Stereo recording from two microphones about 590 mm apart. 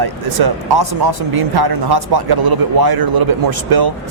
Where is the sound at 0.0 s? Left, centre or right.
Right.